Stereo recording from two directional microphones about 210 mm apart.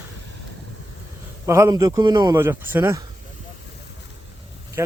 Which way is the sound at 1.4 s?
15° right (ahead or behind).